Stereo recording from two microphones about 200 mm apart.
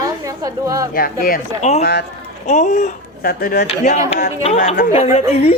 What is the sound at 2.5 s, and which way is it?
A woman's voice, 35° left (ahead or behind).